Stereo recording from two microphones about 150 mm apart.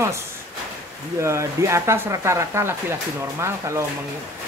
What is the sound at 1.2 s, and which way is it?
Speech, 20° right (ahead or behind).